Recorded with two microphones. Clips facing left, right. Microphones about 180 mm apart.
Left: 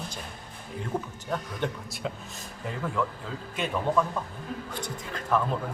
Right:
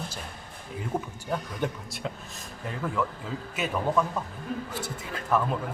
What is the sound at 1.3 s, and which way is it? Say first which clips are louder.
Speech: right 1 dB; 5° right (ahead or behind).